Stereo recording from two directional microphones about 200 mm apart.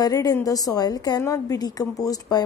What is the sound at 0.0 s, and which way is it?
A woman's voice, 20° left (ahead or behind).